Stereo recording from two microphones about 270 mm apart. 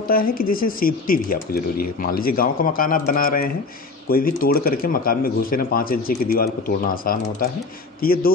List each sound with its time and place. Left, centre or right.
0.1 s speech: left